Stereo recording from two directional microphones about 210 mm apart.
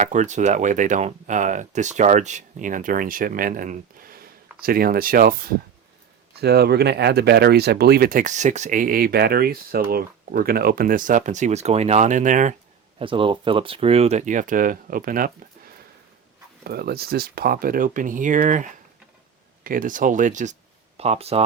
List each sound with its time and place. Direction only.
0.0 s speech: 35° right (ahead or behind)
13.0 s speech: 25° right (ahead or behind)